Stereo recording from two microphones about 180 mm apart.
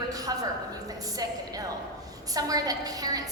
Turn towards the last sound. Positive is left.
turn(degrees=-20)  # may be behind; listen again after turning